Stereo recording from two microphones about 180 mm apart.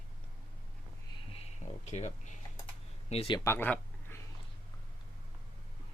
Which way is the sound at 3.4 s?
10° left (ahead or behind).